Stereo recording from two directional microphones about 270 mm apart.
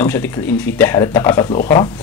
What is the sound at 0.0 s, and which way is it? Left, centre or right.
A man's voice, centre.